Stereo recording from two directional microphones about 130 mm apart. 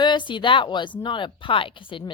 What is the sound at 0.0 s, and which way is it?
A woman's voice, 35° left (ahead or behind).